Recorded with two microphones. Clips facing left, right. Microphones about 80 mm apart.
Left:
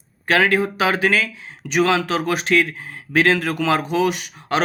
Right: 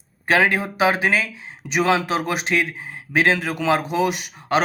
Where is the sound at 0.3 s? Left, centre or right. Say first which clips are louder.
Left 1 dB; right.